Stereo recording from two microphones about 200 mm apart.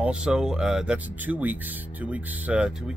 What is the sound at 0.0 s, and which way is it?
Speech, 5° right (ahead or behind).